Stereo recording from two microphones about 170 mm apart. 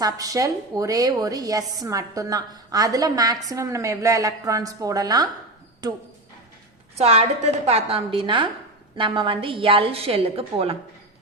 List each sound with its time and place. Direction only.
0.0 s a woman's voice: 20° right (ahead or behind)
6.9 s a woman's voice: 35° right (ahead or behind)